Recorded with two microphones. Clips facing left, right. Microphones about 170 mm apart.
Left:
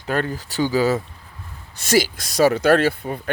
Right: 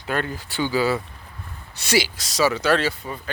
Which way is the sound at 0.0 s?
40° left (ahead or behind).